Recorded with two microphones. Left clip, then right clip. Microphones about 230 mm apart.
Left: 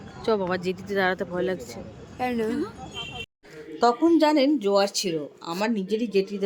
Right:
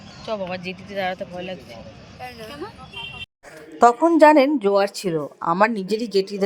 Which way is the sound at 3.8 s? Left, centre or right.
Right.